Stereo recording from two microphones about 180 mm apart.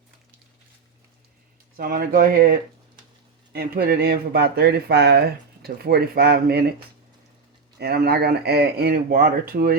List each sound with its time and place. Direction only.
1.7 s speech: 55° right (ahead or behind)
7.8 s speech: 60° right (ahead or behind)